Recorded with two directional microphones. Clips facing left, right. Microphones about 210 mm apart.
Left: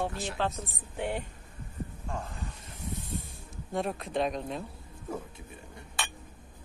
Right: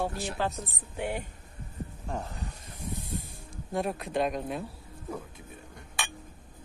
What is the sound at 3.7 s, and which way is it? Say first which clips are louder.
Speech: right 1 dB; centre (ahead or behind).